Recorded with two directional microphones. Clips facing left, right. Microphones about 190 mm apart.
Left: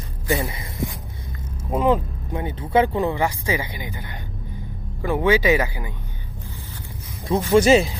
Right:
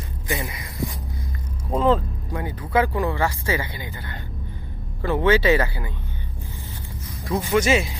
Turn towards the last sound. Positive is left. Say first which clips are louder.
# left 5 dB
turn(degrees=30)  # may be behind; listen again after turning